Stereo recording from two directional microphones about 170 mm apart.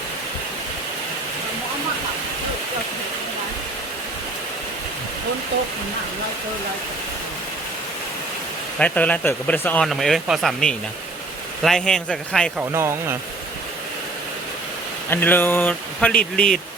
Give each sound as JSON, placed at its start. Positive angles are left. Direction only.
{"t": 8.8, "sound": "speech", "side_deg": 10}
{"t": 12.5, "sound": "speech", "side_deg": -15}
{"t": 15.1, "sound": "speech", "side_deg": 10}